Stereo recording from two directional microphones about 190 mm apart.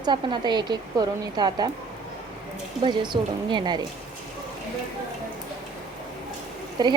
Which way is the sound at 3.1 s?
30° right (ahead or behind).